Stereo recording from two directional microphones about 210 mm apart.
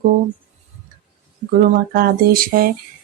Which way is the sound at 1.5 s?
45° right (ahead or behind).